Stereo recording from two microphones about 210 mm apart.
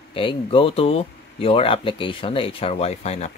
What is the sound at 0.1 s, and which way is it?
Speech, 25° left (ahead or behind).